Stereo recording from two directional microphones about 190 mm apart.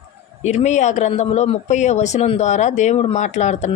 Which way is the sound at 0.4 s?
35° left (ahead or behind).